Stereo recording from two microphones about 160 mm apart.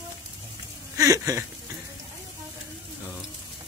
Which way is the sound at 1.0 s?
20° right (ahead or behind).